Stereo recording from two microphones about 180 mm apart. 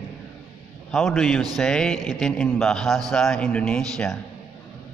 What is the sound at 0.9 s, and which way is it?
A man's voice, 5° left (ahead or behind).